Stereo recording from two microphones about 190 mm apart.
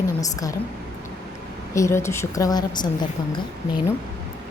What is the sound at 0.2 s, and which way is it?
Speech, 20° left (ahead or behind).